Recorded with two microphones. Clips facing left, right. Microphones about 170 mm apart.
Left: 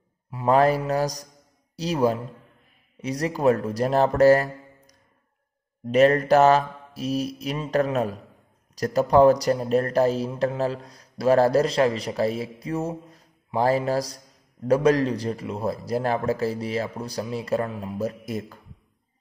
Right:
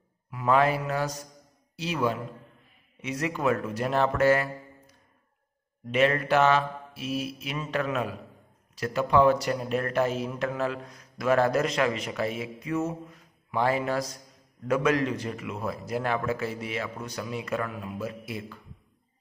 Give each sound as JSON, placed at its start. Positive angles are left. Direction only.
{"t": 0.3, "sound": "speech", "side_deg": 35}